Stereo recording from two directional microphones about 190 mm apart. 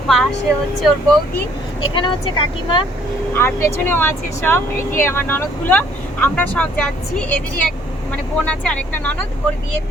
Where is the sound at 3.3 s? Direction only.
10° left (ahead or behind).